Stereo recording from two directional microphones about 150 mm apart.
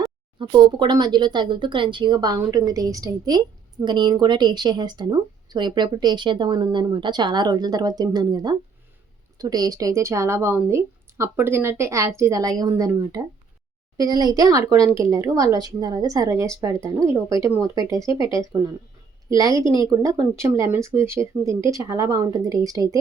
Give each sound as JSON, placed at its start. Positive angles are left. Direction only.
{"t": 0.3, "sound": "speech", "side_deg": -30}
{"t": 18.1, "sound": "speech", "side_deg": 35}
{"t": 19.3, "sound": "speech", "side_deg": -25}